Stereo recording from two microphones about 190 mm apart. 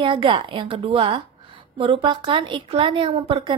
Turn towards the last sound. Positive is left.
turn(degrees=-30)  # may be behind; listen again after turning